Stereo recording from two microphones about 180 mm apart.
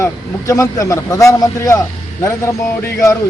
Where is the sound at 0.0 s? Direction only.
15° left (ahead or behind).